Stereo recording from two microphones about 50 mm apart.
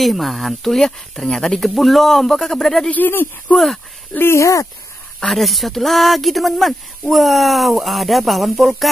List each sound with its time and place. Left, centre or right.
0.0 s speech: centre
2.9 s speech: left
3.5 s speech: centre
5.2 s speech: centre